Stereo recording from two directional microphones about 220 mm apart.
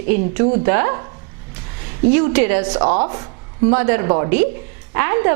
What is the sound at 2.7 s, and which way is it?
A woman's voice, 25° right (ahead or behind).